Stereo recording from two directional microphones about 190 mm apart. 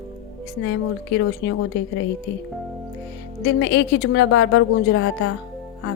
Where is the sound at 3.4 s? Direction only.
75° left (ahead or behind).